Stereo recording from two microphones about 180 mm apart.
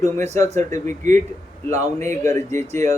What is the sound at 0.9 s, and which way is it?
Speech, 45° right (ahead or behind).